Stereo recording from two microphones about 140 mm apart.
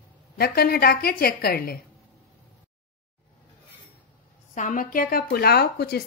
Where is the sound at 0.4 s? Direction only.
90° left.